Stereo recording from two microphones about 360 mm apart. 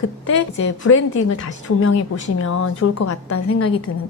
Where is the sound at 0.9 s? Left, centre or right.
Left.